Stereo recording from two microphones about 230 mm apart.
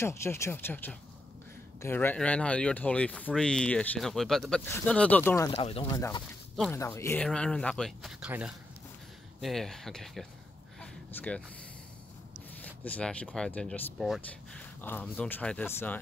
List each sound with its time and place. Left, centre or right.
0.0 s speech: centre
5.5 s speech: left
5.9 s speech: centre
6.5 s speech: centre
10.8 s a sound: centre
12.6 s speech: centre